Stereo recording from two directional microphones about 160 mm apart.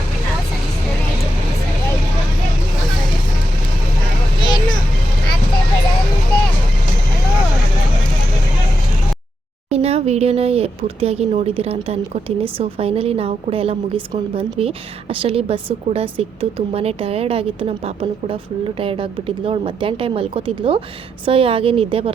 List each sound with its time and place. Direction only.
9.6 s speech: 40° right (ahead or behind)